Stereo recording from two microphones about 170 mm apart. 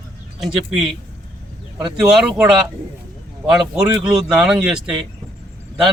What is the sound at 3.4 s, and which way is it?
Speech, 5° right (ahead or behind).